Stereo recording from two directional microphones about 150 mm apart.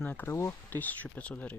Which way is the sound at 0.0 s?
10° left (ahead or behind).